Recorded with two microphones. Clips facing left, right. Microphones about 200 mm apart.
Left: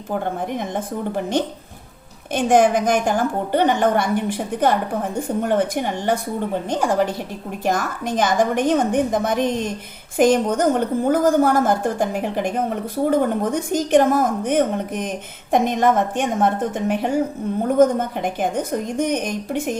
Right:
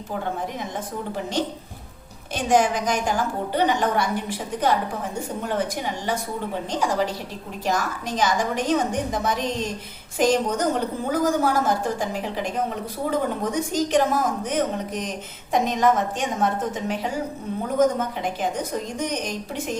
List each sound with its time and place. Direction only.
0.1 s a woman's voice: 50° left (ahead or behind)